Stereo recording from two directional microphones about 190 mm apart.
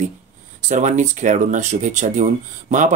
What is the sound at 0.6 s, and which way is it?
Speech, 40° right (ahead or behind).